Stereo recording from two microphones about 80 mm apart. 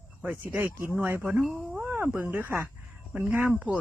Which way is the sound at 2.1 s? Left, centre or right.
Right.